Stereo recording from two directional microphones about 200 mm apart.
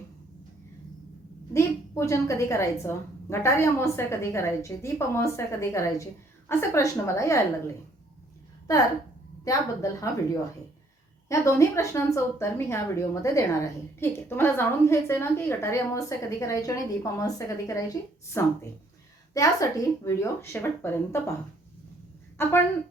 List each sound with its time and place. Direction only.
1.5 s a woman's voice: 15° left (ahead or behind)
9.4 s a woman's voice: 15° left (ahead or behind)
11.3 s a woman's voice: 15° left (ahead or behind)
22.4 s a woman's voice: 10° left (ahead or behind)